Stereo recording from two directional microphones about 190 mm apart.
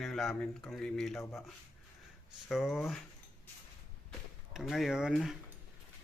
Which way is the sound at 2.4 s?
Centre (ahead or behind).